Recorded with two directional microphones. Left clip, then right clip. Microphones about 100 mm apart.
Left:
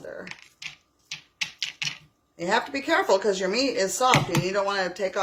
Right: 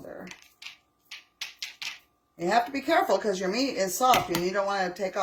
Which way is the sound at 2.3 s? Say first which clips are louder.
Even; 50° left (ahead or behind).